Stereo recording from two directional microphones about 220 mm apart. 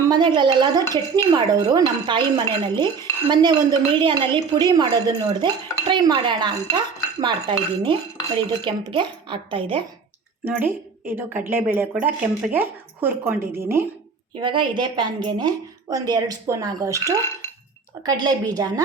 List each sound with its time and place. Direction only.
0.1 s speech: 20° right (ahead or behind)
10.4 s a woman's voice: 10° right (ahead or behind)